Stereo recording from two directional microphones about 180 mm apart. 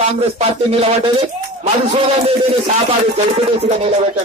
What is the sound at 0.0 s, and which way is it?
A man's voice, 35° right (ahead or behind).